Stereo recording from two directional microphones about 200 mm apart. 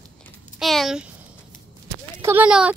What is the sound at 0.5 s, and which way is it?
Speech, centre (ahead or behind).